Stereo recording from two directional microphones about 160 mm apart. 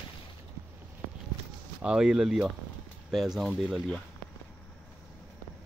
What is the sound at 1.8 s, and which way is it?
Speech, 5° right (ahead or behind).